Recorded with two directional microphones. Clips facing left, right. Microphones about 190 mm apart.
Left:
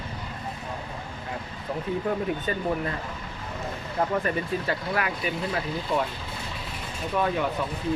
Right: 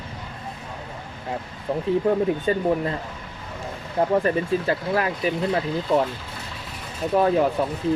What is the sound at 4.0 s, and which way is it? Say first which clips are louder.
Speech: right 6 dB; 30° right (ahead or behind).